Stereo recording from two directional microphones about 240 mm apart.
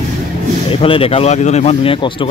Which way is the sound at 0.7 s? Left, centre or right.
Left.